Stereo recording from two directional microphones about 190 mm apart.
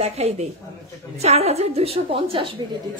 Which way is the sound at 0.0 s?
35° right (ahead or behind).